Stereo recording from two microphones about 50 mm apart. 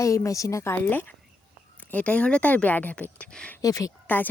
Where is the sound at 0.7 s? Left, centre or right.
Left.